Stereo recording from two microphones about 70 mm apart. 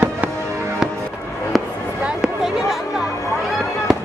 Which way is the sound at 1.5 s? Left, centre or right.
Centre.